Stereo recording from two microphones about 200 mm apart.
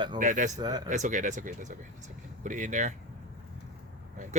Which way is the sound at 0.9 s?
40° right (ahead or behind).